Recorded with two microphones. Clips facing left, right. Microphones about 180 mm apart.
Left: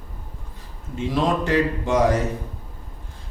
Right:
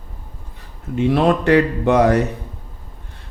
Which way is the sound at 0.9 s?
65° right (ahead or behind).